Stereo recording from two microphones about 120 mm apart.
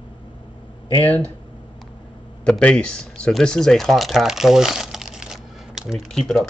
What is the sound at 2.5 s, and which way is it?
Speech, 10° left (ahead or behind).